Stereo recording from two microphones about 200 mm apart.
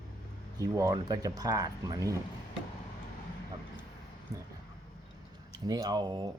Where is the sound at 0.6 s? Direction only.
15° right (ahead or behind).